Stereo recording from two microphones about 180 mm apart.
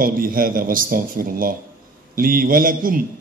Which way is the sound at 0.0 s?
50° right (ahead or behind).